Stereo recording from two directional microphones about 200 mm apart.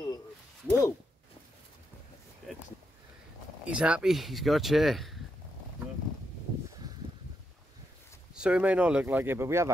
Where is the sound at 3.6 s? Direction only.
5° right (ahead or behind).